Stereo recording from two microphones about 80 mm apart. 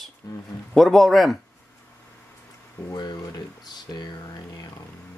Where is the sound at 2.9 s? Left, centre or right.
Left.